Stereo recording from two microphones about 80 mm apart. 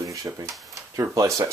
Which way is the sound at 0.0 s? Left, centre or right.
Right.